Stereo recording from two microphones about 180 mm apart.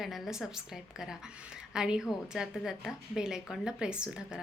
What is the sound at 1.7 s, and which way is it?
A woman's voice, 5° right (ahead or behind).